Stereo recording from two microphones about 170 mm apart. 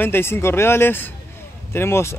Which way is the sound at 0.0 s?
15° left (ahead or behind).